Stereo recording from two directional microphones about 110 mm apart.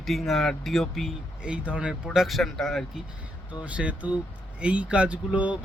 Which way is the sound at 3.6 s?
10° right (ahead or behind).